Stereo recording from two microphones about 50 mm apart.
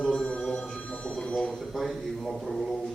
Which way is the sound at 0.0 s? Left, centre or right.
Centre.